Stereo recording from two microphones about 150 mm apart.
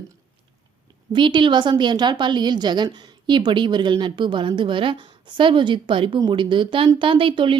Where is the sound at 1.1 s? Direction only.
30° right (ahead or behind).